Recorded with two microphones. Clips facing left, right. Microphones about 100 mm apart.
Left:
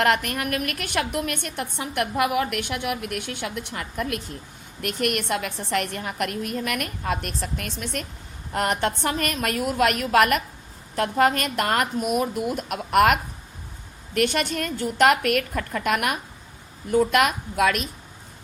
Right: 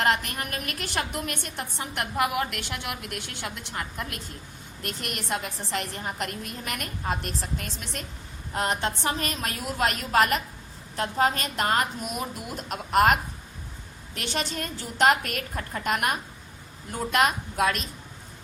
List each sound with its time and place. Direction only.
0.0 s a woman's voice: 60° left (ahead or behind)